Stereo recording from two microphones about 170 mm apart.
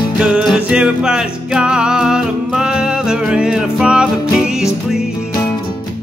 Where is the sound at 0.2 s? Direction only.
5° right (ahead or behind).